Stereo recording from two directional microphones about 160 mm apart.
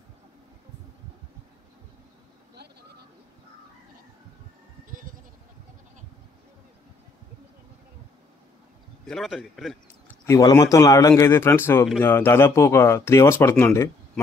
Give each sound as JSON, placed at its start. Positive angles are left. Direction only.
{"t": 9.0, "sound": "a man's voice", "side_deg": 0}
{"t": 10.0, "sound": "speech", "side_deg": 15}